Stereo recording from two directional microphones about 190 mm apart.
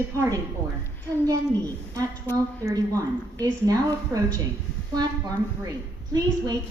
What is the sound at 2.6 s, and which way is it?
A woman's voice, 15° right (ahead or behind).